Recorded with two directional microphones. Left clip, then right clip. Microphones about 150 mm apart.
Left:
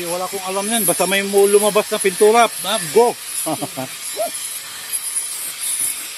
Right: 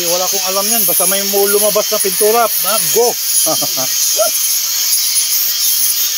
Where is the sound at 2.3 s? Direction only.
25° left (ahead or behind).